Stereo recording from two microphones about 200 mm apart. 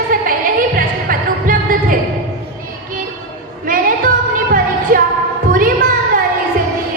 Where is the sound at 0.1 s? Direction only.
45° right (ahead or behind).